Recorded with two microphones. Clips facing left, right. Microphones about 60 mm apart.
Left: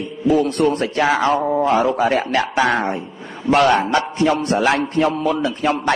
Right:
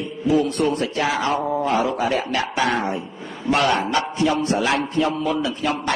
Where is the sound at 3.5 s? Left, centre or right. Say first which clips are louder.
Left 5 dB; left.